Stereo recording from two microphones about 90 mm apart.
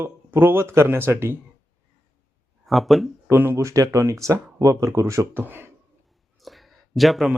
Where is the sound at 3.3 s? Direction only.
25° right (ahead or behind).